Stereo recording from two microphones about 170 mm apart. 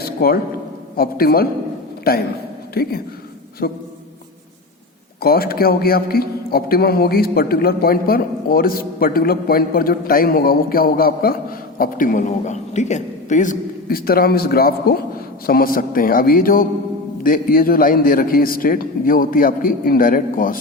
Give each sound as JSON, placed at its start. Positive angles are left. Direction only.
{"t": 0.0, "sound": "a sound", "side_deg": 60}
{"t": 0.9, "sound": "a man's voice", "side_deg": 60}
{"t": 5.2, "sound": "a man's voice", "side_deg": 60}